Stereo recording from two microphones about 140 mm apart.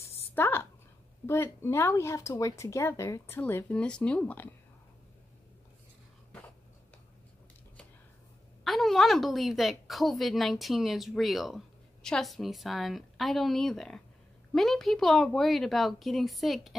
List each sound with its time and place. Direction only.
0.3 s a sound: 15° left (ahead or behind)
1.2 s speech: 15° left (ahead or behind)
8.6 s a woman's voice: centre (ahead or behind)